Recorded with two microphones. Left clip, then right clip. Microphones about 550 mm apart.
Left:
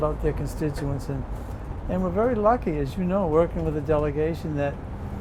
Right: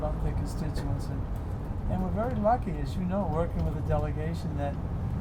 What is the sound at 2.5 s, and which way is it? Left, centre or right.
Speech, left.